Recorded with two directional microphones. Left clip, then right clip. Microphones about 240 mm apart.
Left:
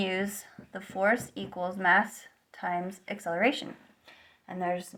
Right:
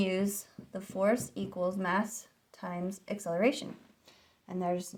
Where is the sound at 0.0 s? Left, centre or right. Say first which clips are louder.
Left 1 dB; right.